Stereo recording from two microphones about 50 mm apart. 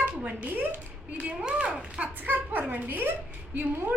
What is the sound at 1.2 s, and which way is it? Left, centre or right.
Speech, right.